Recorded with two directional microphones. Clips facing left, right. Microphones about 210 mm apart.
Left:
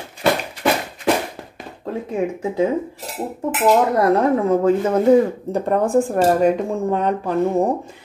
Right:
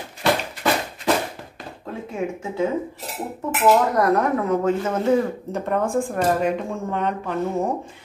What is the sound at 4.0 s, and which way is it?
A woman's voice, 25° left (ahead or behind).